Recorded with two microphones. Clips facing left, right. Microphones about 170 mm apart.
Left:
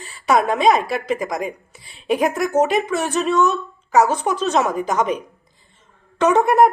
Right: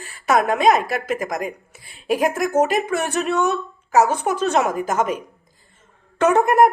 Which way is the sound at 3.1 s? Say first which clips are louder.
Left 4 dB; 60° right (ahead or behind).